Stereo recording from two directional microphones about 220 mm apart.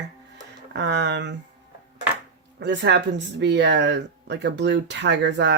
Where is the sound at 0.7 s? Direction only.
50° right (ahead or behind).